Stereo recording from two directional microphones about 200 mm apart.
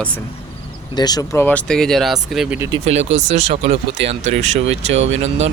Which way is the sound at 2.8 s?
35° right (ahead or behind).